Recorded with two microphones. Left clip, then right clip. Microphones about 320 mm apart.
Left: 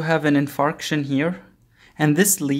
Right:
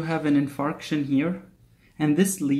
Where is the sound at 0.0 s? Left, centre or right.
Left.